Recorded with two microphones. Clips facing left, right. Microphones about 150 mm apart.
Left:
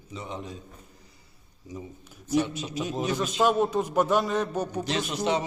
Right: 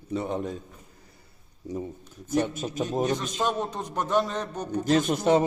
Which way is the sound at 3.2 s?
5° left (ahead or behind).